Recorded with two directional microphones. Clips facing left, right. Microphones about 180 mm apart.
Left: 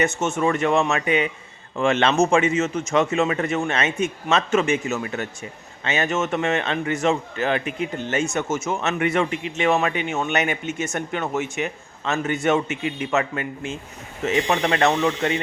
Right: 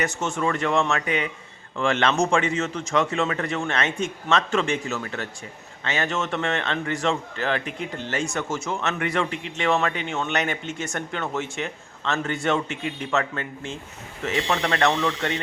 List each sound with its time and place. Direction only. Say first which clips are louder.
0.0 s a man's voice: left 4 dB; 25° left (ahead or behind)